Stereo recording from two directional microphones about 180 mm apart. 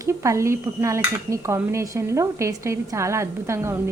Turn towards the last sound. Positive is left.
turn(degrees=-15)  # may be behind; listen again after turning